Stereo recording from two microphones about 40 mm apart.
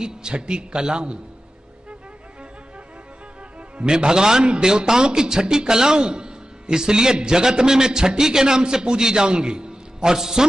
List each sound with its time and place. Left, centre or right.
0.0 s a man's voice: right
3.7 s a man's voice: right